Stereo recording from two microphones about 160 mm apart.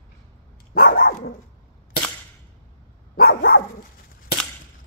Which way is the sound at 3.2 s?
65° left (ahead or behind).